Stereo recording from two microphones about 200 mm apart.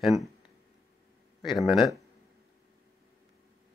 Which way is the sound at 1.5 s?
Centre (ahead or behind).